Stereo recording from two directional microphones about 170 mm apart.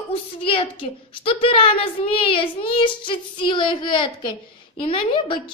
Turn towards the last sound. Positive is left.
turn(degrees=30)  # may be behind; listen again after turning